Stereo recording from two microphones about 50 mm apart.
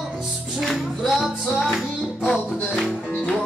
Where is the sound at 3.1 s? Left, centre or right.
Left.